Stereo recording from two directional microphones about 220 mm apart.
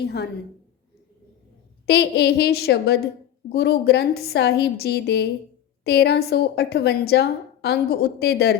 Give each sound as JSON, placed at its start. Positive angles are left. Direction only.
{"t": 0.0, "sound": "a woman's voice", "side_deg": 50}
{"t": 1.9, "sound": "a woman's voice", "side_deg": 50}